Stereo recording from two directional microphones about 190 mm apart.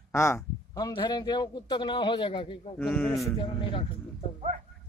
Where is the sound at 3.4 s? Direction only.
25° left (ahead or behind).